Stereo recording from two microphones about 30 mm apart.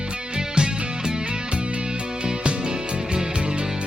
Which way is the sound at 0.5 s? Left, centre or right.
Right.